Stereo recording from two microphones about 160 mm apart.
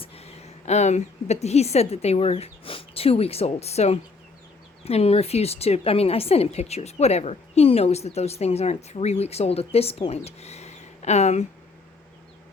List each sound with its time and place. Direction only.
0.0 s a woman's voice: 40° left (ahead or behind)